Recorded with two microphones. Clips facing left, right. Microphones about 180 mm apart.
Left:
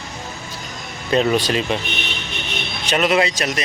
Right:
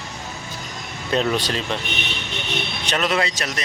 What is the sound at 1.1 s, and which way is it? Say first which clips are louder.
Speech: left 4 dB; 5° left (ahead or behind).